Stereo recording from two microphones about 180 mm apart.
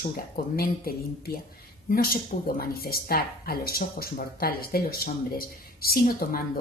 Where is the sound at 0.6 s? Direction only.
55° left (ahead or behind).